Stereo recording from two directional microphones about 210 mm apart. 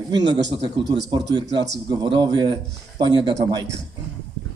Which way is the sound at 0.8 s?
55° right (ahead or behind).